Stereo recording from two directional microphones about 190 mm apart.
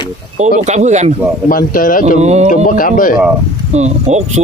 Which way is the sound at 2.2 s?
35° right (ahead or behind).